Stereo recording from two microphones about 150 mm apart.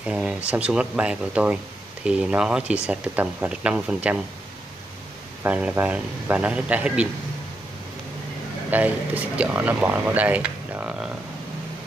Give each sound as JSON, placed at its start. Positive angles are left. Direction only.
{"t": 0.0, "sound": "speech", "side_deg": -5}
{"t": 5.4, "sound": "speech", "side_deg": -10}
{"t": 8.6, "sound": "speech", "side_deg": -10}